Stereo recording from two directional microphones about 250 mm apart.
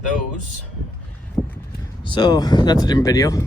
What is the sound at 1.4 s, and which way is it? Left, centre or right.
Clip-clop, centre.